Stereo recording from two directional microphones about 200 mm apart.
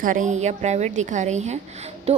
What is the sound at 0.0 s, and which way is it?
A woman's voice, 40° right (ahead or behind).